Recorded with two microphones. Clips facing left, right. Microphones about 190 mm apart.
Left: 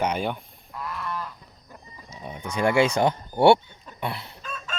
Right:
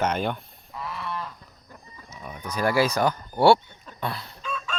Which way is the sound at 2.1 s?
25° left (ahead or behind).